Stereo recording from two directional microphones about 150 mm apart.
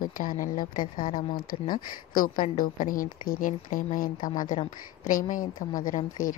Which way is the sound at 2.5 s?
65° left (ahead or behind).